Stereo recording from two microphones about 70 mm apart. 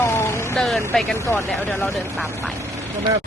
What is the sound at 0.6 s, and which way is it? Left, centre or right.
Speech, centre.